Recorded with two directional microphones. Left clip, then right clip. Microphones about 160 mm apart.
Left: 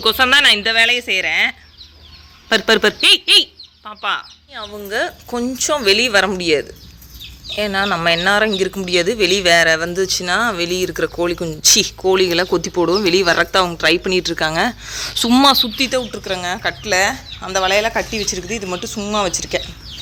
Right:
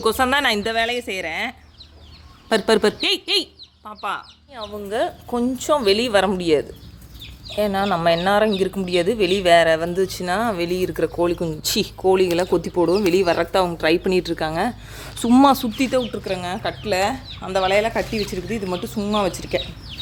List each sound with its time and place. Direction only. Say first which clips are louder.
0.0 s speech: left 6 dB; 10° right (ahead or behind)
0.4 s speech: left 7 dB; 30° right (ahead or behind)
0.7 s speech: left 8 dB; 10° right (ahead or behind)
12.8 s speech: left 3 dB; 5° left (ahead or behind); by 14.3 s 10° right (ahead or behind)
14.3 s speech: left 5 dB; 5° left (ahead or behind)